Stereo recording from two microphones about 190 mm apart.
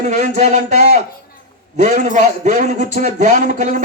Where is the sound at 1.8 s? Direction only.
40° right (ahead or behind).